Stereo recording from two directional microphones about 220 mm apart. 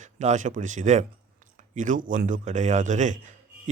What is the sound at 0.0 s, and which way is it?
Speech, 35° right (ahead or behind).